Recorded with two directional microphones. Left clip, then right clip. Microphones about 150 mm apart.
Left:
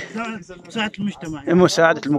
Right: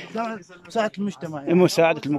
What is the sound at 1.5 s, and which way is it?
Speech, 10° right (ahead or behind).